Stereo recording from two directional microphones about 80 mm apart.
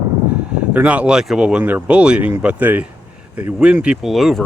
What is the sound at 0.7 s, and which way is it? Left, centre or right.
Speech, centre.